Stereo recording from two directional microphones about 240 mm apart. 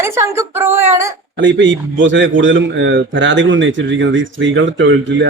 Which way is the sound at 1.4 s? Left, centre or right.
Right.